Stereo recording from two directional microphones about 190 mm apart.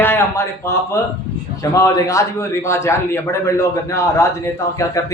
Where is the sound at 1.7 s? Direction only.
15° left (ahead or behind).